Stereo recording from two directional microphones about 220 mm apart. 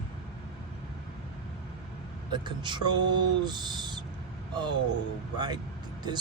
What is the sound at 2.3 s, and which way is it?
Speech, 20° right (ahead or behind).